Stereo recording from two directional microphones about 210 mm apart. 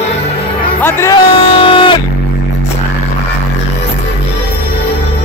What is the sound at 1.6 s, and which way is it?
Music, 25° left (ahead or behind).